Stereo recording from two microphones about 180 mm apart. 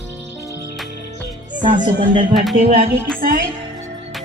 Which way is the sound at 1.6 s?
45° right (ahead or behind).